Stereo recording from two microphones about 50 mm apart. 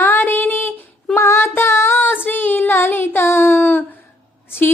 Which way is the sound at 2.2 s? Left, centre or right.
Left.